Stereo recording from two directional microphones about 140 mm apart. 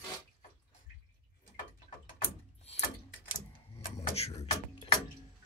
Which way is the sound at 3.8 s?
50° left (ahead or behind).